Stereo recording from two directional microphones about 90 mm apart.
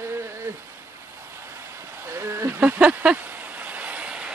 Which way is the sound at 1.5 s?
30° right (ahead or behind).